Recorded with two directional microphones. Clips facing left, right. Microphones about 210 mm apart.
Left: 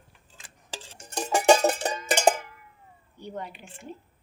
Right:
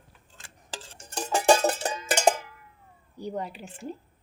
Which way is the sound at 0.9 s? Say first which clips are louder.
Left 2 dB; 10° left (ahead or behind).